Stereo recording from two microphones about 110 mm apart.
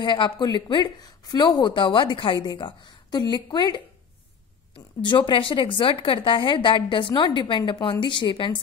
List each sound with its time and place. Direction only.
0.0 s a woman's voice: 45° left (ahead or behind)